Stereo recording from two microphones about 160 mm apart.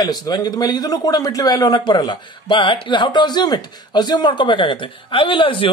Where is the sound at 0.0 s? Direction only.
25° left (ahead or behind).